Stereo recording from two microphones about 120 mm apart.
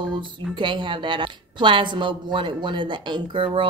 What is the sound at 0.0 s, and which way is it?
Speech, 45° right (ahead or behind).